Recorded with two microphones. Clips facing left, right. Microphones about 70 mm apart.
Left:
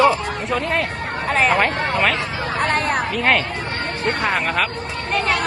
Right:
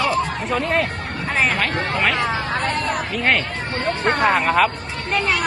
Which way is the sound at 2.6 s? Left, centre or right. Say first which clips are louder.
Left 3 dB; left.